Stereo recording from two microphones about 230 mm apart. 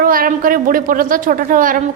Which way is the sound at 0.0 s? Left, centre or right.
Right.